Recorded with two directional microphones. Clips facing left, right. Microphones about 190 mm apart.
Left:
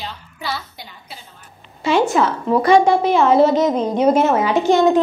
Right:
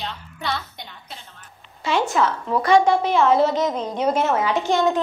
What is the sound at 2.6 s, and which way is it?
A woman's voice, 10° left (ahead or behind).